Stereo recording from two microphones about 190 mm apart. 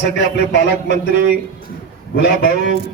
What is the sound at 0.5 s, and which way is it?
Speech, 65° left (ahead or behind).